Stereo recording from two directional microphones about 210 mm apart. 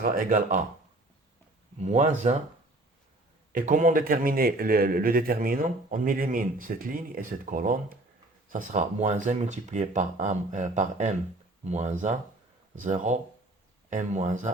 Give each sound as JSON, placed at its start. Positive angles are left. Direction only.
{"t": 0.0, "sound": "speech", "side_deg": -40}
{"t": 1.8, "sound": "speech", "side_deg": -35}
{"t": 3.5, "sound": "speech", "side_deg": -40}